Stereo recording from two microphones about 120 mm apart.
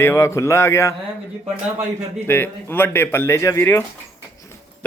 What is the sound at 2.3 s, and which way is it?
Speech, 20° left (ahead or behind).